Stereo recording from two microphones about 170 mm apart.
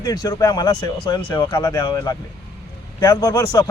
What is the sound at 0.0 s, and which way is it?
A man's voice, 20° left (ahead or behind).